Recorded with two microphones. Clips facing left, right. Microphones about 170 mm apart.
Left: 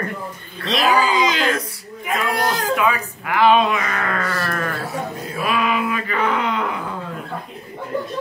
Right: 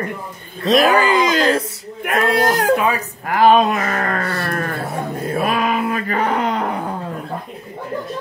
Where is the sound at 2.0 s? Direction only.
60° right (ahead or behind).